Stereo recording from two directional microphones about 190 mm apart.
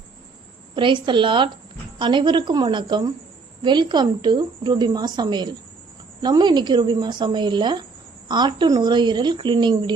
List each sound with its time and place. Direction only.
0.8 s a woman's voice: 25° right (ahead or behind)